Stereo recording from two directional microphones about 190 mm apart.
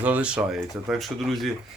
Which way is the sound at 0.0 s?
5° right (ahead or behind).